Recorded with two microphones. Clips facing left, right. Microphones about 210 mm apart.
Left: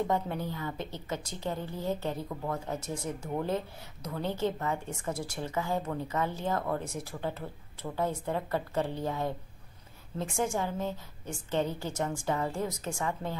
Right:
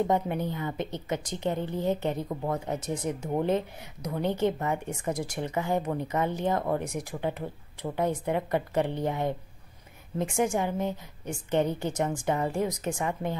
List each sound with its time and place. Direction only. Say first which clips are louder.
0.0 s a woman's voice: right 4 dB; 20° right (ahead or behind)